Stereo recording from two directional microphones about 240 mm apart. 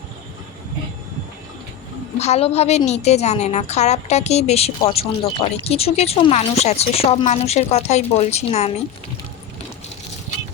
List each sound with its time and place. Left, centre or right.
2.1 s a woman's voice: left